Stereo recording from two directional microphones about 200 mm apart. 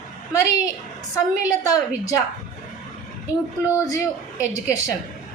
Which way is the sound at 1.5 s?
15° left (ahead or behind).